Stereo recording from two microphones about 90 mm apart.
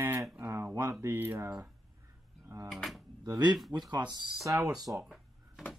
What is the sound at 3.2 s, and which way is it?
Speech, 50° right (ahead or behind).